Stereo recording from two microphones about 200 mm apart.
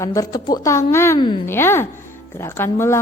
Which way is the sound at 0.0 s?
15° left (ahead or behind).